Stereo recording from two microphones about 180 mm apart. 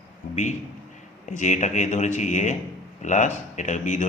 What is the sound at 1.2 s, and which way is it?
Speech, 40° left (ahead or behind).